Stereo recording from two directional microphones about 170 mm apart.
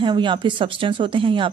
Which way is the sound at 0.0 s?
30° right (ahead or behind).